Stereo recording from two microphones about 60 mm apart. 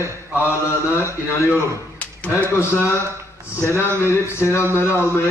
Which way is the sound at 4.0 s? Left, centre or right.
Left.